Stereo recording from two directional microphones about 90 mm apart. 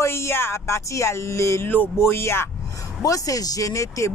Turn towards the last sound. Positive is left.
turn(degrees=35)  # may be behind; listen again after turning